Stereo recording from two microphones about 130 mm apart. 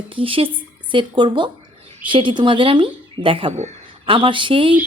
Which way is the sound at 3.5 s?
60° right (ahead or behind).